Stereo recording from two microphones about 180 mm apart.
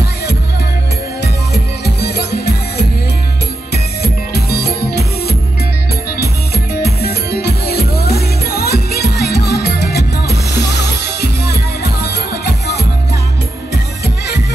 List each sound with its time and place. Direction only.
1.2 s music: 65° left (ahead or behind)
4.3 s music: 60° left (ahead or behind)